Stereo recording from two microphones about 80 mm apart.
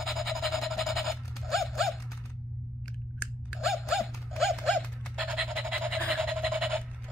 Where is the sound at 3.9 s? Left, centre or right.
Centre.